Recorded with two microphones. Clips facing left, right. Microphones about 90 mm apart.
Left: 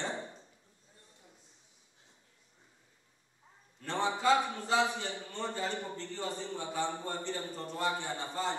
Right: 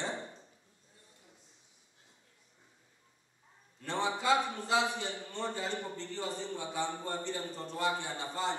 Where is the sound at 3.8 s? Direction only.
10° right (ahead or behind).